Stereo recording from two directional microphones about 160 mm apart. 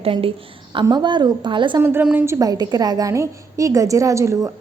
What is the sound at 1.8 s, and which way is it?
A woman's voice, 15° right (ahead or behind).